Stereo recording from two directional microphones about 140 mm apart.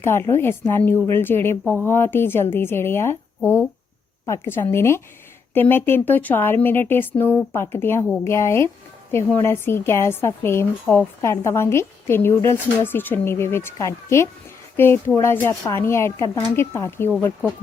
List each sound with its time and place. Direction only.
0.3 s a woman's voice: 15° left (ahead or behind)